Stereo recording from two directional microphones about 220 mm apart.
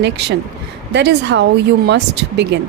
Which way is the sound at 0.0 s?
50° right (ahead or behind).